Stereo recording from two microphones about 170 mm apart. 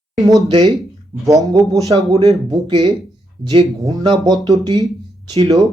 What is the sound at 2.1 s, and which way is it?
Speech, 35° right (ahead or behind).